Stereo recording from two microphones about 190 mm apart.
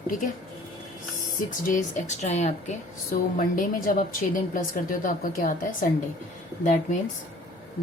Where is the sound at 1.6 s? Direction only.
40° left (ahead or behind).